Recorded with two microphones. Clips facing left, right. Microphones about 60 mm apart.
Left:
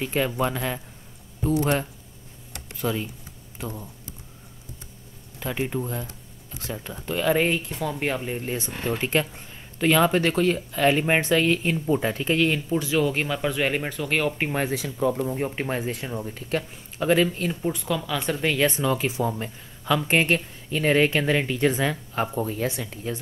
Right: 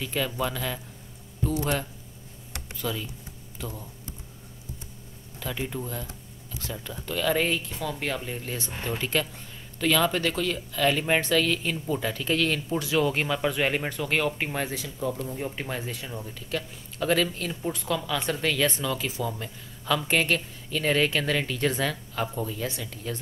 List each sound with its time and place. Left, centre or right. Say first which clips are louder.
0.0 s speech: left 4 dB; left
5.4 s speech: left 5 dB; left
12.6 s speech: left 2 dB; centre
14.4 s speech: left 4 dB; centre
15.2 s speech: left 5 dB; left
16.3 s speech: left 4 dB; left
17.0 s speech: left 4 dB; centre
17.6 s speech: even; centre
18.5 s speech: left 5 dB; left
19.8 s speech: left 3 dB; centre
22.1 s speech: left 4 dB; left
22.7 s speech: left 4 dB; left